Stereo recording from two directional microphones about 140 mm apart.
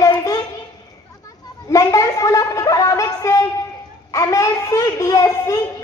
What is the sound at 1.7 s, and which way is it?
A child's voice, 25° left (ahead or behind).